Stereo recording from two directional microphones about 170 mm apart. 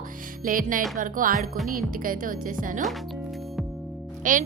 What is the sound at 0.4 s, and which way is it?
Music, 55° right (ahead or behind).